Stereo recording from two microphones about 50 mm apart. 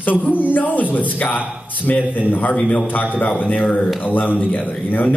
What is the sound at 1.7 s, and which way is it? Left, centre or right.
Speech, left.